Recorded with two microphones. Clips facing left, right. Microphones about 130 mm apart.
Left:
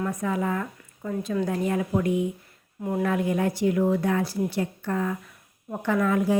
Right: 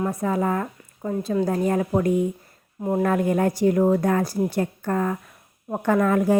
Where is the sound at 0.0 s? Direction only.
30° right (ahead or behind).